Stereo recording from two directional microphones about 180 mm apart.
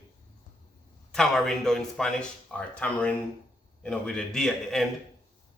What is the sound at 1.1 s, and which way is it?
A man's voice, 5° left (ahead or behind).